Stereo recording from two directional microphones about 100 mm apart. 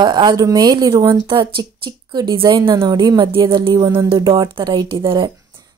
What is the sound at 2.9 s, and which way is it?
A woman's voice, 40° right (ahead or behind).